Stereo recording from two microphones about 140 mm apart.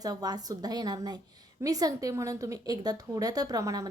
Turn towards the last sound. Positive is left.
turn(degrees=-25)  # may be behind; listen again after turning